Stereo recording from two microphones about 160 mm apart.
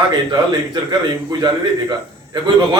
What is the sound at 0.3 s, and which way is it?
A man's voice, 25° right (ahead or behind).